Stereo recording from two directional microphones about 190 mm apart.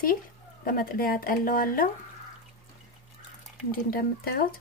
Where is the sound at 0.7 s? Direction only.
50° left (ahead or behind).